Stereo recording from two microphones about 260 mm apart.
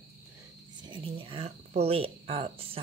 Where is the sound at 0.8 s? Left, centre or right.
Centre.